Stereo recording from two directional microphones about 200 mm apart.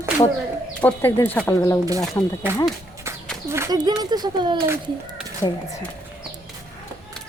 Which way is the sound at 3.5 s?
15° right (ahead or behind).